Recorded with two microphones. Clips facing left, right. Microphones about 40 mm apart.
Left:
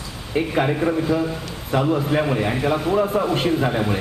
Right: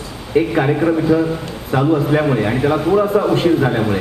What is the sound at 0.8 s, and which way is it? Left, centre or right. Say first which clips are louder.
A man's voice: right 6 dB; centre.